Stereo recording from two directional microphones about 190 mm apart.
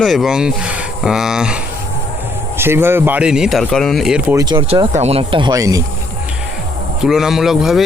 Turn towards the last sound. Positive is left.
turn(degrees=0)  # may be behind; listen again after turning